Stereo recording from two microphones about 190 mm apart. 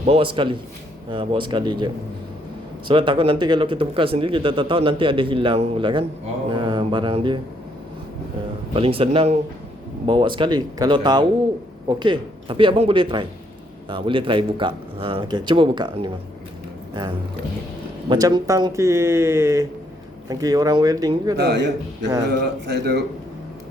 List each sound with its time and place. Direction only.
0.0 s speech: 30° right (ahead or behind)
6.5 s mantra: 25° right (ahead or behind)
8.7 s speech: 30° right (ahead or behind)
18.1 s speech: 20° right (ahead or behind)
21.3 s a man's voice: 60° right (ahead or behind)